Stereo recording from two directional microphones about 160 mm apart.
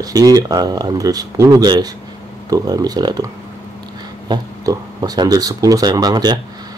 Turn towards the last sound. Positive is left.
turn(degrees=-25)  # may be behind; listen again after turning